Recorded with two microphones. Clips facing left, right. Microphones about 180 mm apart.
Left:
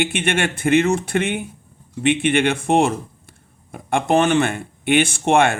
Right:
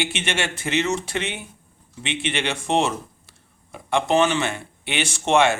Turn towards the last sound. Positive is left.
turn(degrees=55)  # may be behind; listen again after turning